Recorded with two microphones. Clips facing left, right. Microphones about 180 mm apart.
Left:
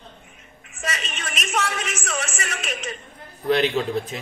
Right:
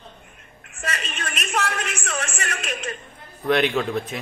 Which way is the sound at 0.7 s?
Centre (ahead or behind).